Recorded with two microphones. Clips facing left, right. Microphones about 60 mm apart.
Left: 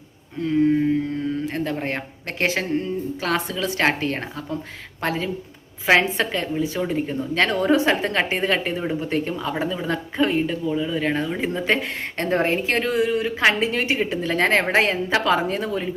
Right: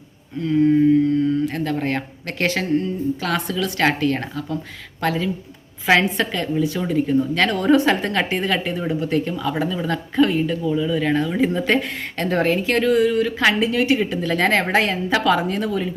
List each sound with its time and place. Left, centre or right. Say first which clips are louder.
1.5 s speech: right 3 dB; left
13.5 s speech: right 3 dB; left